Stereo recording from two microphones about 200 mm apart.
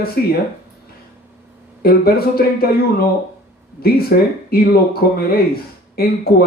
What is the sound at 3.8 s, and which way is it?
Speech, 50° left (ahead or behind).